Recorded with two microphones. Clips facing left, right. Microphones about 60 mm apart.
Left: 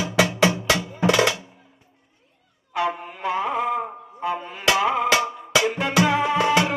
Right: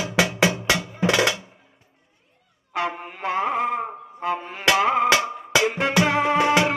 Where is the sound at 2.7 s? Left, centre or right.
Right.